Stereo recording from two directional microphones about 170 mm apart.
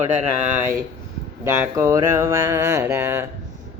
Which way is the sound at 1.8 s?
20° right (ahead or behind).